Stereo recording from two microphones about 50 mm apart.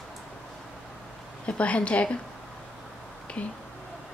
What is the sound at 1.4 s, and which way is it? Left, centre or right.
Speech, left.